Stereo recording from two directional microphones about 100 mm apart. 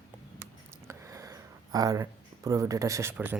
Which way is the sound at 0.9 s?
35° right (ahead or behind).